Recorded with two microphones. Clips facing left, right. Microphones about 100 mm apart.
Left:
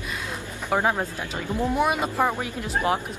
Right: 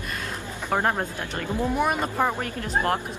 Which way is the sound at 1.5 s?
15° left (ahead or behind).